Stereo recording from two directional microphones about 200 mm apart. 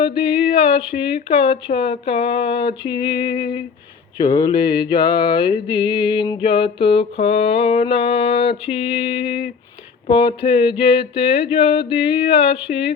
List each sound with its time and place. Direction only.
0.0 s mantra: 25° left (ahead or behind)